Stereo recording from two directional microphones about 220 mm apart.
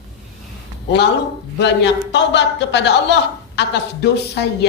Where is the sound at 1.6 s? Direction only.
50° left (ahead or behind).